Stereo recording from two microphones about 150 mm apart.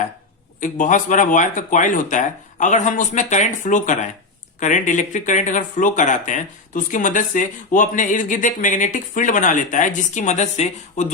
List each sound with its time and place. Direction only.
0.6 s speech: 60° left (ahead or behind)